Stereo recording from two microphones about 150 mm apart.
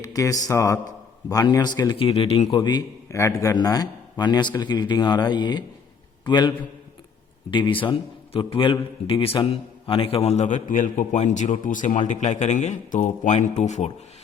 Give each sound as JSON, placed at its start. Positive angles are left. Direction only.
{"t": 0.0, "sound": "a man's voice", "side_deg": 20}
{"t": 7.5, "sound": "a man's voice", "side_deg": 35}
{"t": 10.2, "sound": "a man's voice", "side_deg": 50}